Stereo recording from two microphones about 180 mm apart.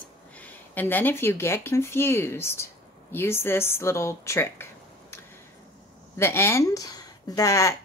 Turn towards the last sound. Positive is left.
turn(degrees=20)  # may be behind; listen again after turning